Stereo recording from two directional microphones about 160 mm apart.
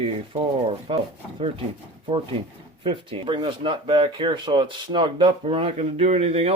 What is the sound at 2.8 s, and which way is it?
Speech, 35° right (ahead or behind).